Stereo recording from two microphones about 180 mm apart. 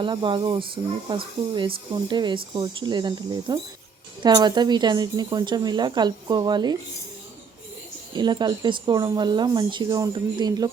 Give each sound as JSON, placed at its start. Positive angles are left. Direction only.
{"t": 0.0, "sound": "a woman's voice", "side_deg": -30}
{"t": 8.1, "sound": "a woman's voice", "side_deg": -25}